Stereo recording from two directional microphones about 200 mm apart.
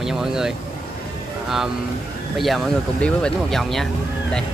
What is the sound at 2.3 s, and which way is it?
Speech, centre (ahead or behind).